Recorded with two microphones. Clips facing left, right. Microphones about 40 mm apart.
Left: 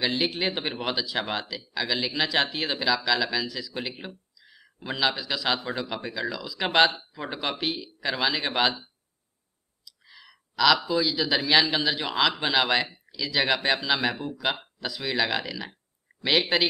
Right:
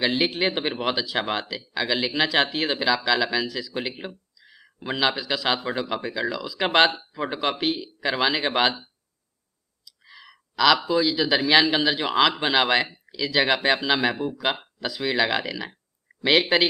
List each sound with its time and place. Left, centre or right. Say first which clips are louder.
0.0 s speech: right 3 dB; centre
10.0 s clicking: right 5 dB; centre
10.9 s speech: right 3 dB; centre